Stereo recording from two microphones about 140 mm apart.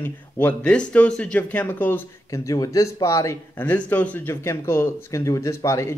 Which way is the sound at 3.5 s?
10° left (ahead or behind).